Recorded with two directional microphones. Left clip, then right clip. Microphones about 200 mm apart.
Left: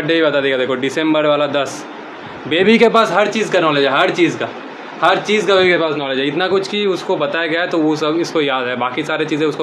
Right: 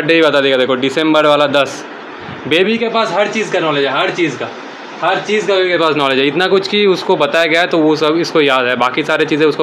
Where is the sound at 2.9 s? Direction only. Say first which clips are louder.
Left 1 dB; 15° left (ahead or behind).